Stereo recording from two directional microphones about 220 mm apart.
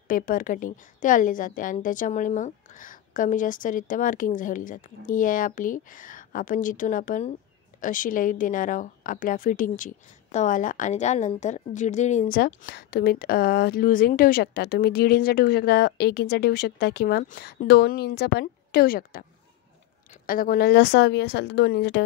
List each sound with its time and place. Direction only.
0.1 s a woman's voice: 40° left (ahead or behind)